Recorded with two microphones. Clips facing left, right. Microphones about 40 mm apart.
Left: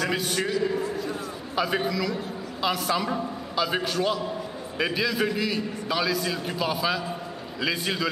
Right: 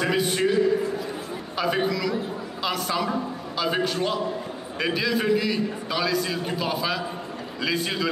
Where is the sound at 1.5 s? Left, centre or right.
Centre.